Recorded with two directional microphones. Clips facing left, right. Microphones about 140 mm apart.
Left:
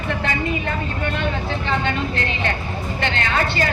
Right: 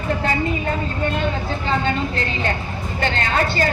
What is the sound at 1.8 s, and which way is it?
A woman's voice, 35° right (ahead or behind).